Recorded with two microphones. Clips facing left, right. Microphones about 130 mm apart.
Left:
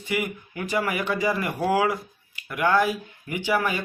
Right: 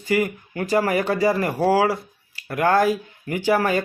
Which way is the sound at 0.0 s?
40° right (ahead or behind).